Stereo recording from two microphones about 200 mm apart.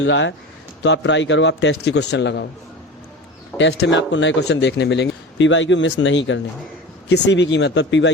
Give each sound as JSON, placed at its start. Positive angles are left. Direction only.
{"t": 0.0, "sound": "speech", "side_deg": 70}
{"t": 3.6, "sound": "speech", "side_deg": 60}